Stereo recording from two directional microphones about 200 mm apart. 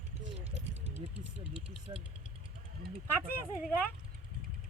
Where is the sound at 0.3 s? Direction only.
30° right (ahead or behind).